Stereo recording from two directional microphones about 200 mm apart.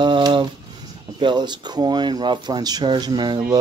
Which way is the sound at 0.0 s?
25° right (ahead or behind).